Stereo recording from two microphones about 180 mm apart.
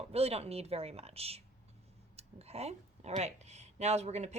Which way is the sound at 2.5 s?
35° right (ahead or behind).